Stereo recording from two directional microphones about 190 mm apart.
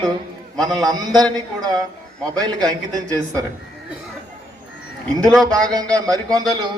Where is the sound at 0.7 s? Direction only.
Centre (ahead or behind).